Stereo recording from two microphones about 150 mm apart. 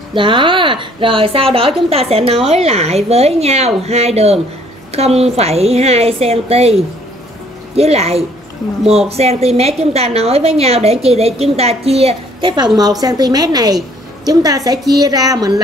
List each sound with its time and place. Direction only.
0.1 s a woman's voice: 35° right (ahead or behind)